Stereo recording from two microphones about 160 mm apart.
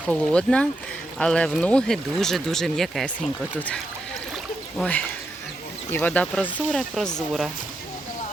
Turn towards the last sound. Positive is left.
turn(degrees=5)  # may be behind; listen again after turning